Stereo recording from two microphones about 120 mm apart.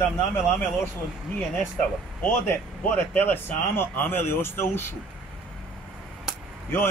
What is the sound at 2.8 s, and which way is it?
Speech, 15° left (ahead or behind).